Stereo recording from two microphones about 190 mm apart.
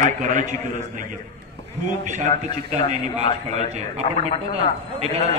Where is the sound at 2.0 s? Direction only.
40° right (ahead or behind).